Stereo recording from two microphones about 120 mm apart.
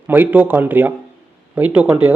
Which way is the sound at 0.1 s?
15° right (ahead or behind).